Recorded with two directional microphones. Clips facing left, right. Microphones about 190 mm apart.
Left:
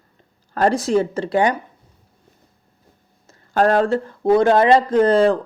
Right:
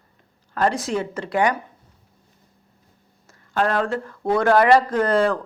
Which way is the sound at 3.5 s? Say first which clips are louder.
Left 6 dB; 40° left (ahead or behind).